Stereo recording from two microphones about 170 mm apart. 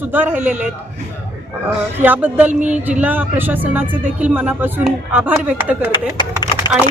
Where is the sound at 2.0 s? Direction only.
10° right (ahead or behind).